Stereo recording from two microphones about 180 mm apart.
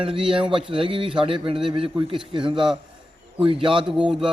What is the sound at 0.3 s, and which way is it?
A man's voice, 30° right (ahead or behind).